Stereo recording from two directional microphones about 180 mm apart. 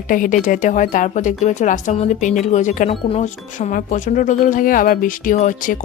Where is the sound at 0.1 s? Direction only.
50° left (ahead or behind).